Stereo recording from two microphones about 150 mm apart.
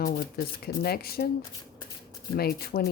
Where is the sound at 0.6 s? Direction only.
90° left.